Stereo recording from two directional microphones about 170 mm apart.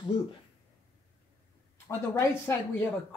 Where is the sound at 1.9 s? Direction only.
15° left (ahead or behind).